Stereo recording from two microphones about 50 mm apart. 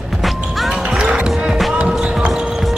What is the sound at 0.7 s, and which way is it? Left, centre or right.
Music, centre.